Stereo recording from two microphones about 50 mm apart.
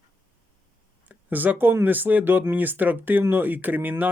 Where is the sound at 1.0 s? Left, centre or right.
Right.